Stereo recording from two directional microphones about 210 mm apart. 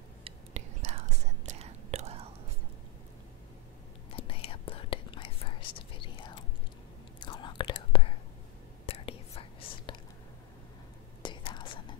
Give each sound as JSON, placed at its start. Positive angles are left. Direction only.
{"t": 0.2, "sound": "whispering", "side_deg": -30}
{"t": 4.1, "sound": "whispering", "side_deg": 25}
{"t": 11.2, "sound": "whispering", "side_deg": 20}